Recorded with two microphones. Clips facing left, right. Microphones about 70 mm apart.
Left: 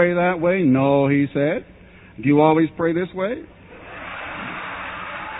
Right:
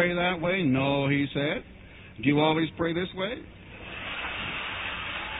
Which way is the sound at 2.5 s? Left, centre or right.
Left.